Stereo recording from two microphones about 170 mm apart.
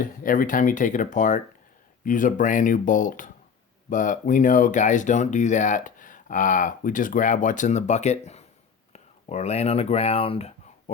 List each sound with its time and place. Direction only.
0.0 s speech: 55° left (ahead or behind); by 10.9 s 35° left (ahead or behind)